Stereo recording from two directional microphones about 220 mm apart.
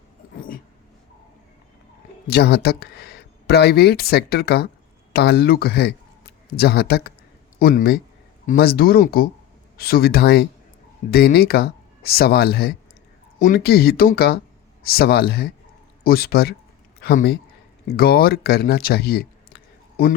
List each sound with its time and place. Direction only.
2.2 s speech: 45° left (ahead or behind)